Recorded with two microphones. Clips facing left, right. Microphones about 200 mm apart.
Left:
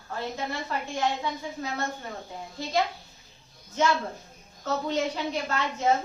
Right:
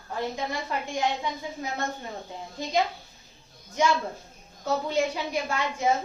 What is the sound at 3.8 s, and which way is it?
A woman's voice, 15° right (ahead or behind).